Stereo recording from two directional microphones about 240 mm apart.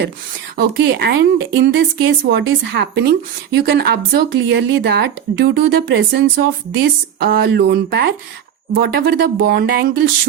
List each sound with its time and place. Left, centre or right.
0.5 s a woman's voice: right